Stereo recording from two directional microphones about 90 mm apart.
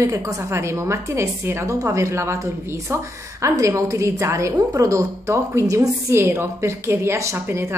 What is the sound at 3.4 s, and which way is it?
A woman's voice, 35° right (ahead or behind).